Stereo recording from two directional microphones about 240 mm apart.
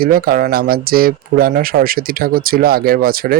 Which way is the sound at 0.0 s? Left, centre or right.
Right.